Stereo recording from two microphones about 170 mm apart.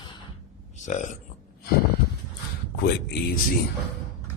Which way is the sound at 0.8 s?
45° left (ahead or behind).